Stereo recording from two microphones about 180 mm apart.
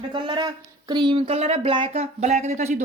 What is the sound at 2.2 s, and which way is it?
Speech, 40° right (ahead or behind).